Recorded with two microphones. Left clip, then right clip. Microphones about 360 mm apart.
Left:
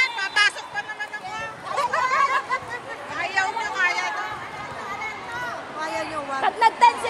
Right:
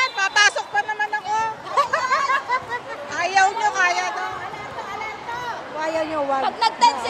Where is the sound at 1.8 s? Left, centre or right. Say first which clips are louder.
Right 1 dB; right.